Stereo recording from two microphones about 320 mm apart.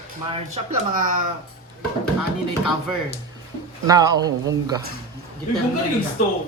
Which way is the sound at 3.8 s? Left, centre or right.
Centre.